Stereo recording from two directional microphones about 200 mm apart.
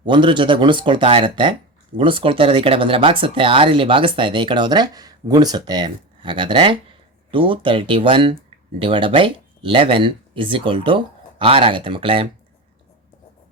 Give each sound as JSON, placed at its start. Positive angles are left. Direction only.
{"t": 0.0, "sound": "speech", "side_deg": -25}